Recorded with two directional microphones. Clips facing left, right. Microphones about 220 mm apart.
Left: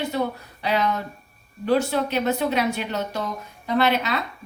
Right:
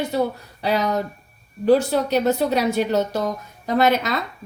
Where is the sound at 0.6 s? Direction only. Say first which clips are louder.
Right 3 dB; 40° right (ahead or behind).